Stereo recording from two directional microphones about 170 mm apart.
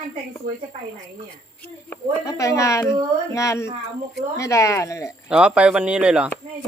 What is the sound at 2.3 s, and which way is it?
Speech, 20° left (ahead or behind).